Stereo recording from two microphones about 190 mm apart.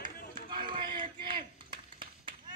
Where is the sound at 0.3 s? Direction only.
25° right (ahead or behind).